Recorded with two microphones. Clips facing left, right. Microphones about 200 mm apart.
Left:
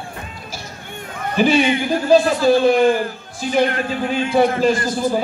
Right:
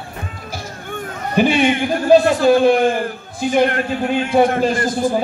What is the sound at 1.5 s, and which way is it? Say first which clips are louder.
A man's voice: even; 50° right (ahead or behind).